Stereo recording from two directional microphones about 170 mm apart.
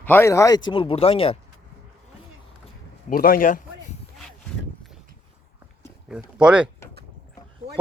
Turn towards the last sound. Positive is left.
turn(degrees=-5)  # may be behind; listen again after turning